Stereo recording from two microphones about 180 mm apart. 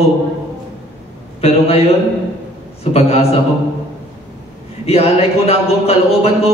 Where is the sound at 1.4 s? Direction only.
35° left (ahead or behind).